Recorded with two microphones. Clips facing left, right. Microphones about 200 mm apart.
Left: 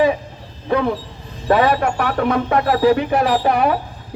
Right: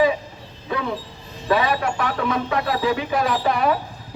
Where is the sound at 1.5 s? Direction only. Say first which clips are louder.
Left 5 dB; 55° left (ahead or behind).